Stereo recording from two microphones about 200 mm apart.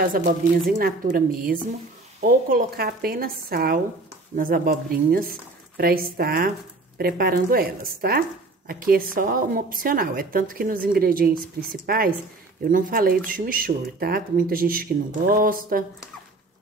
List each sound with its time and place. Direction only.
0.0 s a woman's voice: 45° right (ahead or behind)